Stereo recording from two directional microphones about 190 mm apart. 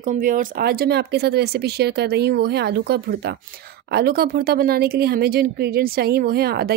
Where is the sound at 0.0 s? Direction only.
45° right (ahead or behind).